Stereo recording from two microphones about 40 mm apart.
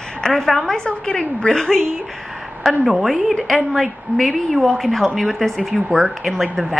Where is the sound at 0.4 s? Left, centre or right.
Centre.